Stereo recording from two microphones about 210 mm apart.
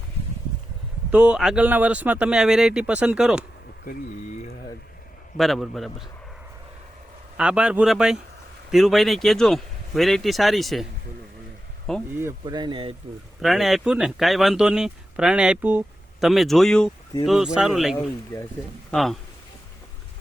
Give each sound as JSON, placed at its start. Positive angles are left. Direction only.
{"t": 1.1, "sound": "speech", "side_deg": -5}
{"t": 3.8, "sound": "speech", "side_deg": 45}
{"t": 5.4, "sound": "speech", "side_deg": 0}
{"t": 7.3, "sound": "speech", "side_deg": -5}
{"t": 12.1, "sound": "speech", "side_deg": -15}
{"t": 13.4, "sound": "speech", "side_deg": 0}